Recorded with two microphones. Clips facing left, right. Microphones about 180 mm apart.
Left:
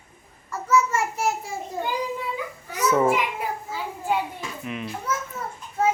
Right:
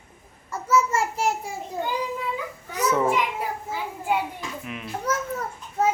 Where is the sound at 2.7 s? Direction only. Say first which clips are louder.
Left 2 dB; centre (ahead or behind).